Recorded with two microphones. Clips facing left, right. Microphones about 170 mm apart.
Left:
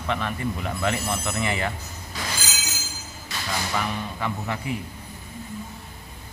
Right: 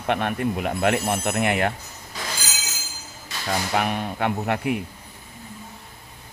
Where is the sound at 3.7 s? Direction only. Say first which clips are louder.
Right 6 dB; 60° right (ahead or behind).